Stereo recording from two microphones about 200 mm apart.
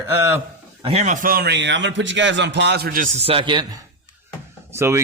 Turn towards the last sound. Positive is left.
turn(degrees=-15)  # may be behind; listen again after turning